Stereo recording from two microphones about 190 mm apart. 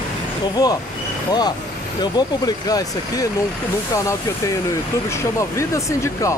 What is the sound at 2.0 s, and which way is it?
Speech, 20° left (ahead or behind).